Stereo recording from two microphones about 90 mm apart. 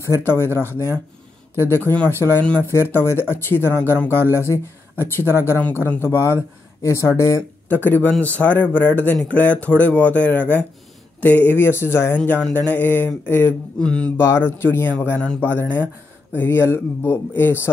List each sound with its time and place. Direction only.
0.0 s speech: 30° left (ahead or behind)
7.7 s speech: 20° left (ahead or behind)
12.3 s speech: 15° left (ahead or behind)
14.1 s speech: 30° left (ahead or behind)